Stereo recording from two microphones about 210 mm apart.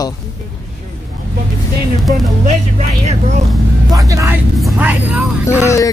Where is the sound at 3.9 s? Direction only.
15° right (ahead or behind).